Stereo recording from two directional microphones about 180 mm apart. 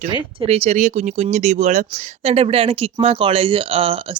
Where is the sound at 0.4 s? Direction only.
35° right (ahead or behind).